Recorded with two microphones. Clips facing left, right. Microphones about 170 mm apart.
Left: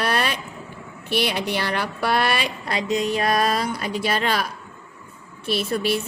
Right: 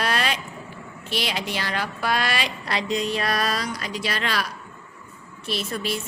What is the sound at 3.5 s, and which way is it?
A woman's voice, 55° left (ahead or behind).